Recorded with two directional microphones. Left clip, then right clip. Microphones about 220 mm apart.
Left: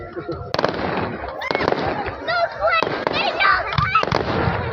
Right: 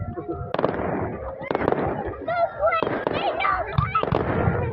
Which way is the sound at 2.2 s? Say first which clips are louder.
Left 2 dB; 35° left (ahead or behind).